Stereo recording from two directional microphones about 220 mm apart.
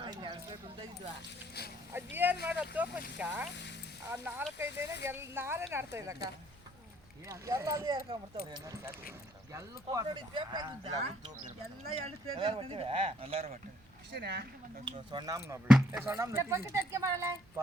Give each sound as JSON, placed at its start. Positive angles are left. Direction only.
{"t": 0.0, "sound": "a sound", "side_deg": -20}
{"t": 1.9, "sound": "speech", "side_deg": -10}
{"t": 7.3, "sound": "speech", "side_deg": -15}
{"t": 9.9, "sound": "speech", "side_deg": -20}
{"t": 14.1, "sound": "speech", "side_deg": -50}
{"t": 14.8, "sound": "speech", "side_deg": -20}